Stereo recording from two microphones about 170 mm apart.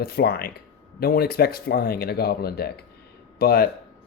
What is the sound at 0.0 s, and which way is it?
Speech, 65° left (ahead or behind).